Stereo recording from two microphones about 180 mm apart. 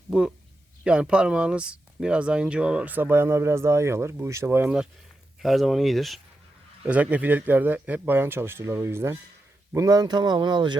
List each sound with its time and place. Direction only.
0.1 s speech: 5° right (ahead or behind); by 10.8 s 25° right (ahead or behind)